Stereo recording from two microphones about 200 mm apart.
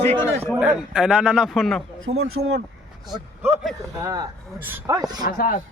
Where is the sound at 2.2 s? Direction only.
90° right.